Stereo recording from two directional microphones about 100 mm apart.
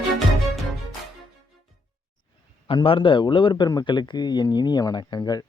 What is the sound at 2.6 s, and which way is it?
A man's voice, 60° left (ahead or behind).